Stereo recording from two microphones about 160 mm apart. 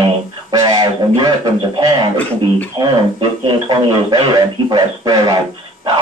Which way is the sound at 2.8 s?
30° right (ahead or behind).